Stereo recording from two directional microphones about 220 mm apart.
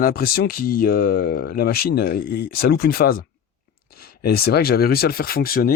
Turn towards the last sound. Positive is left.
turn(degrees=40)  # may be behind; listen again after turning